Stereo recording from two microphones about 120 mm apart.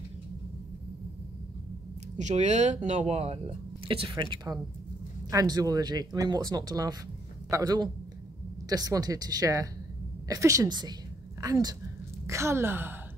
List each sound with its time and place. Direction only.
2.1 s speech: 75° right (ahead or behind); by 3.3 s 60° right (ahead or behind)
3.8 s speech: 50° right (ahead or behind)
4.1 s a man's voice: 35° right (ahead or behind)
10.7 s speech: 35° right (ahead or behind); by 12.9 s 20° right (ahead or behind)